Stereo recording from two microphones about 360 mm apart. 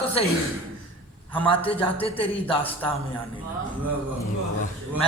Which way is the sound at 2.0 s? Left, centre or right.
Centre.